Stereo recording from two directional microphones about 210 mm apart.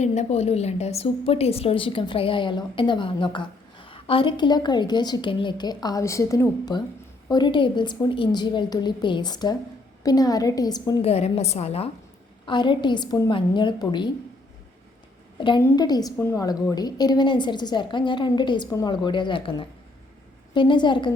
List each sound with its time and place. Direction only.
0.0 s a woman's voice: 35° left (ahead or behind); by 11.1 s 20° left (ahead or behind)
11.1 s a woman's voice: 30° left (ahead or behind)
15.4 s a woman's voice: 20° left (ahead or behind)